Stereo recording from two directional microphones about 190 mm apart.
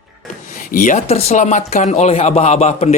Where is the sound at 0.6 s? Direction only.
45° left (ahead or behind).